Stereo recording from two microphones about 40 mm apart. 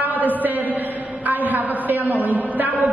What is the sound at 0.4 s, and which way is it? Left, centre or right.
A man's voice, right.